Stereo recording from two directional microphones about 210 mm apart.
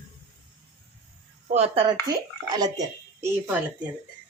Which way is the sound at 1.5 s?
30° right (ahead or behind).